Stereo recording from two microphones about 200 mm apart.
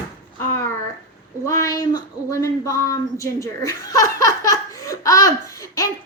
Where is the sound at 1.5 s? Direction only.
15° left (ahead or behind).